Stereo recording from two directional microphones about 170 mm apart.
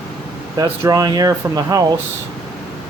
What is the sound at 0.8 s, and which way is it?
Speech, 20° right (ahead or behind).